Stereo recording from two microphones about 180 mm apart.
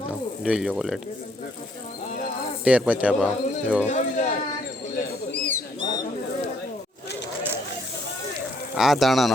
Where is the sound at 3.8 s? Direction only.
40° left (ahead or behind).